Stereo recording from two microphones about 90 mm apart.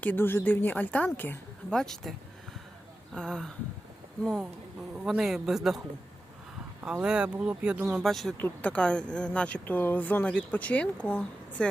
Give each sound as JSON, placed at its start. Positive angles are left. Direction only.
{"t": 0.0, "sound": "a woman's voice", "side_deg": 20}
{"t": 1.7, "sound": "speech", "side_deg": 5}
{"t": 3.2, "sound": "speech", "side_deg": 10}
{"t": 5.0, "sound": "speech", "side_deg": -5}
{"t": 6.8, "sound": "speech", "side_deg": -10}
{"t": 7.9, "sound": "speech", "side_deg": 0}
{"t": 8.4, "sound": "speech", "side_deg": 20}